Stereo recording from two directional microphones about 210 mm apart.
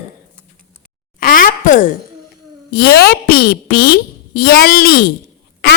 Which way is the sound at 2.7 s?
45° left (ahead or behind).